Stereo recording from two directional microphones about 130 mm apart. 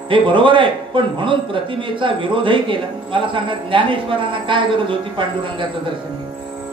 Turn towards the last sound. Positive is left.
turn(degrees=-40)  # may be behind; listen again after turning